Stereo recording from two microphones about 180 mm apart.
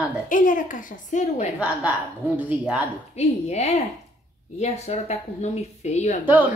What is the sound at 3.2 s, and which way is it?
A woman's voice, 40° left (ahead or behind).